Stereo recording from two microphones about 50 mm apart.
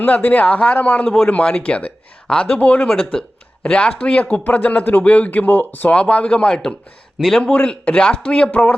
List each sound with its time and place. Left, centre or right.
0.0 s speech: left
1.0 s a man's voice: centre; by 5.9 s left
5.9 s speech: left
7.2 s a man's voice: centre